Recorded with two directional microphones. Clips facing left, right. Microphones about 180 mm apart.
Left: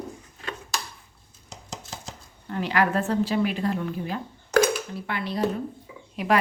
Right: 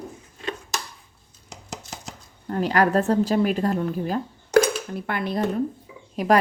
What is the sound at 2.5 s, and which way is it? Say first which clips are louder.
A woman's voice: right 4 dB; 40° right (ahead or behind).